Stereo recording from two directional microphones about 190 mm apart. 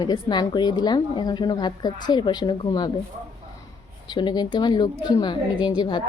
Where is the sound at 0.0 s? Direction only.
20° left (ahead or behind).